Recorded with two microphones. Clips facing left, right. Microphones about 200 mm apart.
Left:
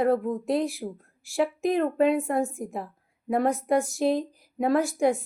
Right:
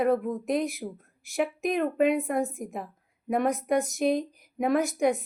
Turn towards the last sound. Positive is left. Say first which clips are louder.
# left 1 dB
turn(degrees=-20)  # may be behind; listen again after turning